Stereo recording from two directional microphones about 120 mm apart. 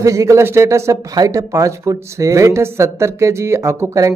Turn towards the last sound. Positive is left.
turn(degrees=-25)  # may be behind; listen again after turning